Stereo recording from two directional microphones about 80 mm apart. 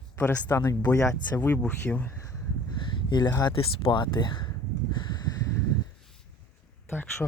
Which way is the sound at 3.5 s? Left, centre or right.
Left.